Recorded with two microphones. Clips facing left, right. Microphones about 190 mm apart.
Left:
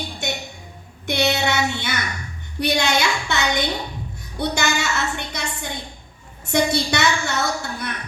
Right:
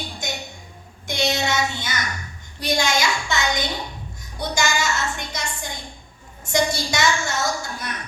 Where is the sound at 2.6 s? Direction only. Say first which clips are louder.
Left 2 dB; 65° left (ahead or behind).